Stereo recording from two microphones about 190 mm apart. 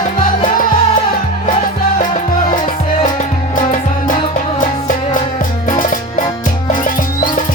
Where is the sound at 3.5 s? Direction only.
45° left (ahead or behind).